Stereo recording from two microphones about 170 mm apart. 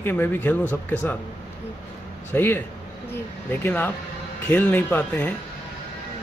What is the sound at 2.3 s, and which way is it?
Speech, 10° left (ahead or behind).